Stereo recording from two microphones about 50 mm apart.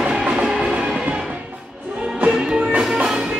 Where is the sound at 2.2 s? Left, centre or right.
Centre.